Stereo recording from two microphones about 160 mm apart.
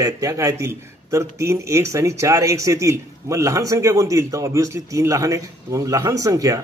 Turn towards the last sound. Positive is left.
turn(degrees=-20)  # may be behind; listen again after turning